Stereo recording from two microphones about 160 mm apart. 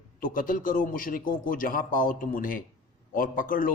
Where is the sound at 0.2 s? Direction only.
60° left (ahead or behind).